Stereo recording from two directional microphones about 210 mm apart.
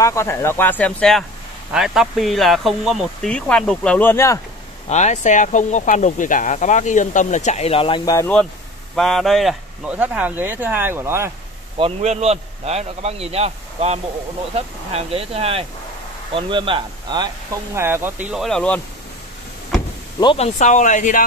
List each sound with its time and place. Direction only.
0.0 s speech: 15° left (ahead or behind)
4.8 s speech: 35° left (ahead or behind); by 8.3 s 15° left (ahead or behind)
8.9 s speech: centre (ahead or behind)
11.8 s a man's voice: 30° right (ahead or behind); by 18.8 s 5° left (ahead or behind)
20.2 s speech: 25° left (ahead or behind)